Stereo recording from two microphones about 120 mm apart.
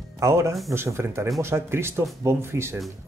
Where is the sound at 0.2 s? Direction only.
25° right (ahead or behind).